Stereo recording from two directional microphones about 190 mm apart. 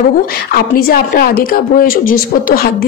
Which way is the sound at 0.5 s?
55° left (ahead or behind).